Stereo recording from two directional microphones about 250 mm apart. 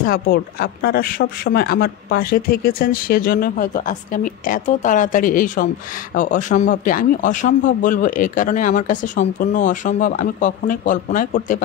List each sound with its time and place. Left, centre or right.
0.0 s speech: left